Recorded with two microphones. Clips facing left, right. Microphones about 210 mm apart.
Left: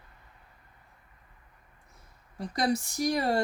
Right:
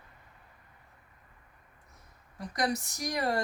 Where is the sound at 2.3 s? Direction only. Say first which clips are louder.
Left 3 dB; 30° left (ahead or behind).